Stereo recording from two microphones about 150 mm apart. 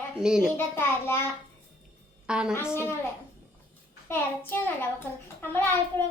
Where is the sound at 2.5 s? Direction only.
15° left (ahead or behind).